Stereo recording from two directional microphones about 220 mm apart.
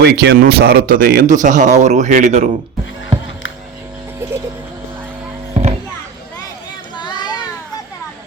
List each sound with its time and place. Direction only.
0.0 s speech: 50° right (ahead or behind); by 2.5 s 35° right (ahead or behind)
4.2 s music: 10° right (ahead or behind)
6.9 s a sound: 20° left (ahead or behind)